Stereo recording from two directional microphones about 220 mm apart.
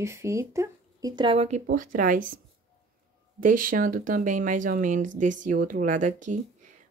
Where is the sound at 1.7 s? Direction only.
40° right (ahead or behind).